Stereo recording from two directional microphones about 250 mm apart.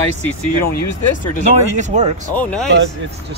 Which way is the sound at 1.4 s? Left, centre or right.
Right.